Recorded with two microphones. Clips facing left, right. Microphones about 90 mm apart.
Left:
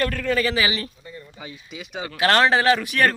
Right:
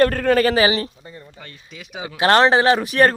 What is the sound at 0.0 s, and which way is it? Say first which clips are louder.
A man's voice: right 7 dB; 50° right (ahead or behind).